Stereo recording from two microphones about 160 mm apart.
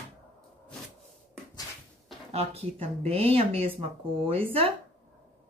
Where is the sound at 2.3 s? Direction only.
40° right (ahead or behind).